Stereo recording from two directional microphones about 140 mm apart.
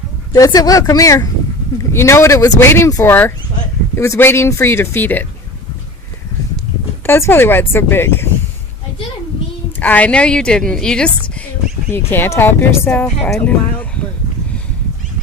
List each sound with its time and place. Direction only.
0.3 s speech: 25° left (ahead or behind)
7.0 s speech: 15° left (ahead or behind)
9.8 s speech: 10° left (ahead or behind)